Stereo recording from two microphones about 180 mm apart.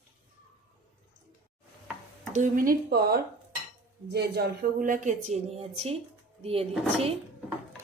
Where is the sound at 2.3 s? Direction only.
45° right (ahead or behind).